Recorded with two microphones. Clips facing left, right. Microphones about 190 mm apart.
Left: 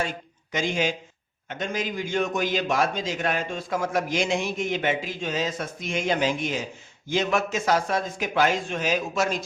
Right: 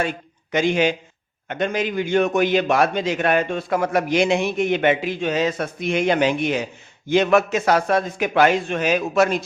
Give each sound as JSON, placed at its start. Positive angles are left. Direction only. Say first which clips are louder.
{"t": 0.5, "sound": "a man's voice", "louder": "right 7 dB", "side_deg": -65}